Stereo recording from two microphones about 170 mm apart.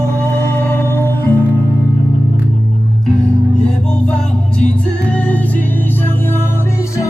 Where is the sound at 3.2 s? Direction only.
5° left (ahead or behind).